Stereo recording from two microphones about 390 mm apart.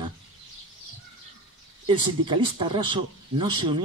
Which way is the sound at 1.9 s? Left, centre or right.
Centre.